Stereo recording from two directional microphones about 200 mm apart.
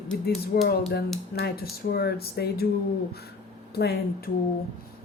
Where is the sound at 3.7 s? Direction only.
50° left (ahead or behind).